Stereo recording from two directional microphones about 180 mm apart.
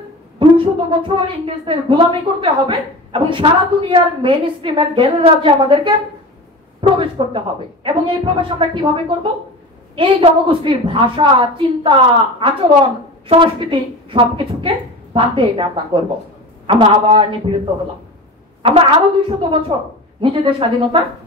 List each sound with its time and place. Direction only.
0.4 s a woman's voice: 30° right (ahead or behind)
18.6 s a woman's voice: 30° right (ahead or behind)